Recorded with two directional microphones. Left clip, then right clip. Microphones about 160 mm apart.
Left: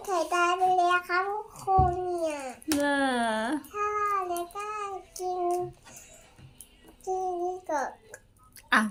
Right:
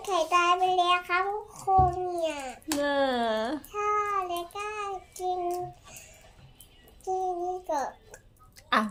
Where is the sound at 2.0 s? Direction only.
35° right (ahead or behind).